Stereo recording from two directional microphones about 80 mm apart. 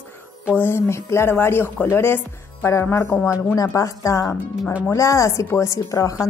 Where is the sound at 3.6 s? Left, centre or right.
Left.